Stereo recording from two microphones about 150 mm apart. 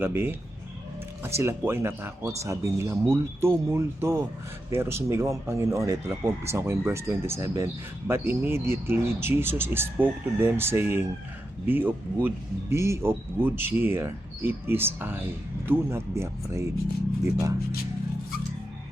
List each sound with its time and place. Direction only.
0.0 s speech: 15° right (ahead or behind)